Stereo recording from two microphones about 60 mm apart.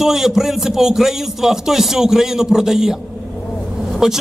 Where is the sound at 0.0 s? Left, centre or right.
Centre.